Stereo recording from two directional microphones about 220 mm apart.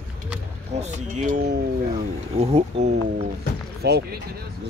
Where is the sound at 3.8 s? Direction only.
45° right (ahead or behind).